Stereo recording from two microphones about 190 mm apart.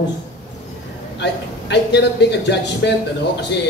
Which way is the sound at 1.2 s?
60° left (ahead or behind).